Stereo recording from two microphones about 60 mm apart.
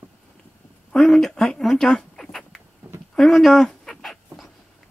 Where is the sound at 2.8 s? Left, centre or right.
Right.